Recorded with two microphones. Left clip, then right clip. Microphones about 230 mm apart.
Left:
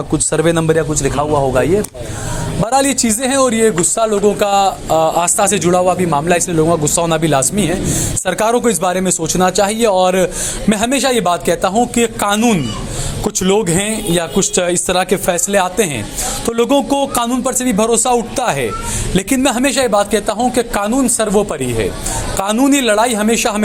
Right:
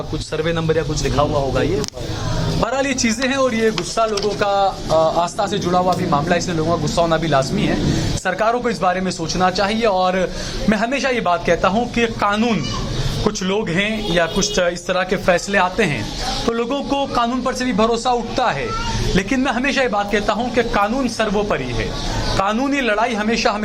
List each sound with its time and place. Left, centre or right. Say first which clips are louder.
0.3 s speech: left 6 dB; left
2.6 s speech: left 6 dB; left